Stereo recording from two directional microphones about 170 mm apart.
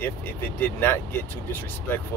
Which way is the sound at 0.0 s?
15° left (ahead or behind).